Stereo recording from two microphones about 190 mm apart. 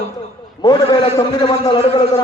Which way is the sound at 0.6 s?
20° left (ahead or behind).